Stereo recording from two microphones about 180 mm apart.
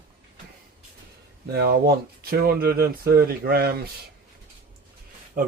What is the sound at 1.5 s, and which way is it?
Speech, 60° right (ahead or behind).